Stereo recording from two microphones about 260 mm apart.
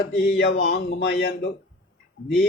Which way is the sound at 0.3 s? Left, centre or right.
Left.